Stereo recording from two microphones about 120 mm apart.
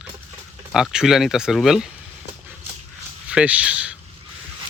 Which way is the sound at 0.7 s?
5° right (ahead or behind).